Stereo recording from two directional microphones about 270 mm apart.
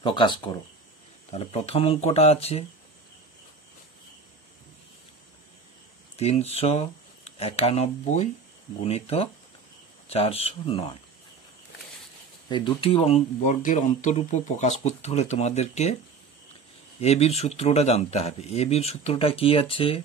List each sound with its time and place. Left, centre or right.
0.0 s speech: centre
6.1 s speech: left
12.4 s speech: centre
17.0 s speech: left